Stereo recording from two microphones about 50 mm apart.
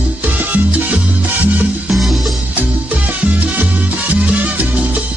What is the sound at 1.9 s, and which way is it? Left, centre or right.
Music, centre.